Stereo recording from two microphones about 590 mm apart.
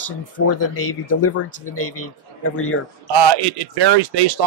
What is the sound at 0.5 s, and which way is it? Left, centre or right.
Speech, left.